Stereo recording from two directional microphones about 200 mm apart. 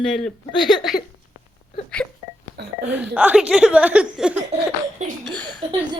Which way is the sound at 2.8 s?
5° right (ahead or behind).